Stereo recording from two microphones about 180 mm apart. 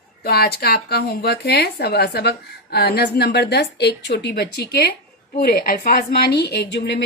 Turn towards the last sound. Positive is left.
turn(degrees=70)  # may be behind; listen again after turning